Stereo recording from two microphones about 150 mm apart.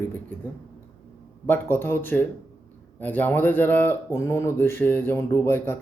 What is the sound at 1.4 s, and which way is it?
Speech, 15° left (ahead or behind).